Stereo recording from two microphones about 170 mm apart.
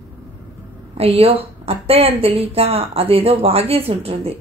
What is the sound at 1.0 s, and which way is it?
Speech, 35° right (ahead or behind).